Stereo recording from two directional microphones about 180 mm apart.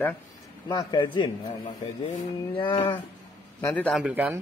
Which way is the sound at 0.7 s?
25° left (ahead or behind).